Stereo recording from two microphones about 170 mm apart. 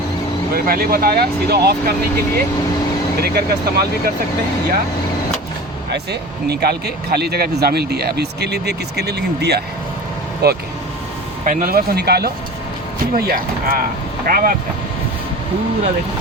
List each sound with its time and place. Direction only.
0.5 s speech: 60° right (ahead or behind)
5.9 s speech: 70° right (ahead or behind)
11.4 s speech: 60° right (ahead or behind)